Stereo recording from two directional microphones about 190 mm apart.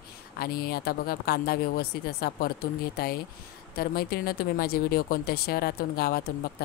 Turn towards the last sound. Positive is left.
turn(degrees=55)  # may be behind; listen again after turning